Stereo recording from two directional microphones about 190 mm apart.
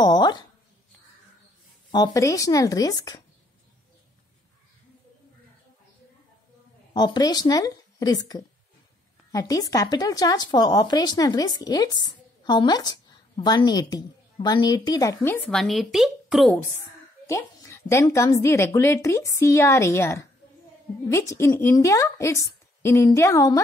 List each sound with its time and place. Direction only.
0.0 s a sound: 20° left (ahead or behind)
1.9 s a woman's voice: 20° left (ahead or behind)
6.9 s a woman's voice: 25° left (ahead or behind); by 16.5 s centre (ahead or behind)
17.3 s a woman's voice: 15° left (ahead or behind)